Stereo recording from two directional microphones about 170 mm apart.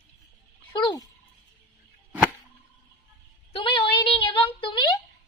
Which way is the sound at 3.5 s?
30° left (ahead or behind).